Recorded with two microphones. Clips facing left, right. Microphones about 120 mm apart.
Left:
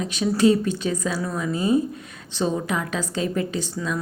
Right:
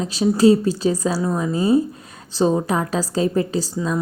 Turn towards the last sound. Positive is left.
turn(degrees=-30)  # may be behind; listen again after turning